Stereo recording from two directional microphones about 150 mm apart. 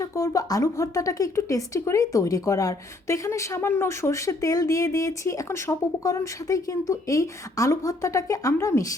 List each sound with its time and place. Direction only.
0.0 s speech: 20° left (ahead or behind)